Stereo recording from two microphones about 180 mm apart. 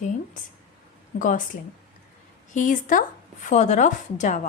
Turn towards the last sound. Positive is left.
turn(degrees=40)  # may be behind; listen again after turning